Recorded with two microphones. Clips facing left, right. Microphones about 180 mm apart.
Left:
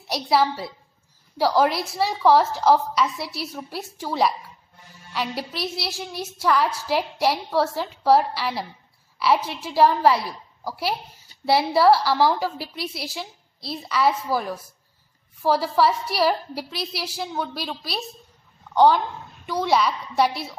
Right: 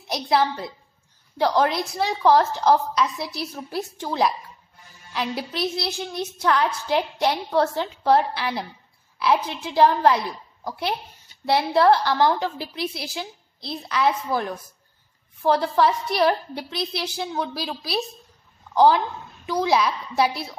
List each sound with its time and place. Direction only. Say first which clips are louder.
0.1 s a woman's voice: left 1 dB; 5° left (ahead or behind)